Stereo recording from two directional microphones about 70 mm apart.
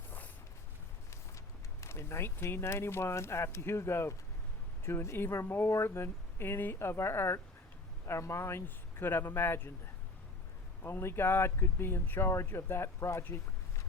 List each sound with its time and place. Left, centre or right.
1.8 s speech: left
10.8 s speech: left
13.2 s a sound: left